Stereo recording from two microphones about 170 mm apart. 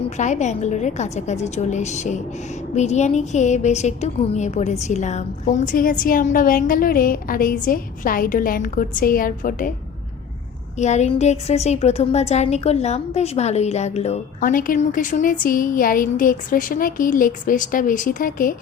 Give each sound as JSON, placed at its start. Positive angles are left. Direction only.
{"t": 0.2, "sound": "a woman's voice", "side_deg": 45}
{"t": 10.8, "sound": "a woman's voice", "side_deg": 40}
{"t": 14.5, "sound": "a woman's voice", "side_deg": 50}